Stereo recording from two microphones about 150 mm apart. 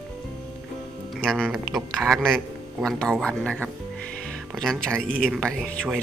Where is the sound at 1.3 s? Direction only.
Centre (ahead or behind).